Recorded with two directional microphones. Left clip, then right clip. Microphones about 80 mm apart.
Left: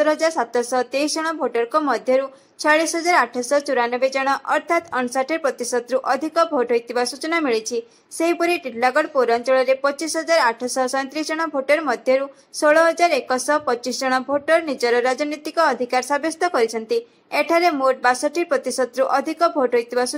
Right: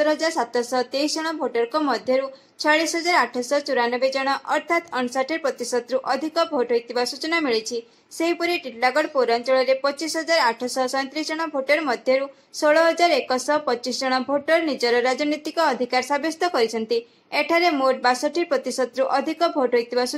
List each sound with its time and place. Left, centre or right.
0.0 s speech: left
2.9 s speech: right
3.5 s speech: left
5.5 s speech: right
5.8 s speech: left
10.0 s speech: right
11.0 s speech: centre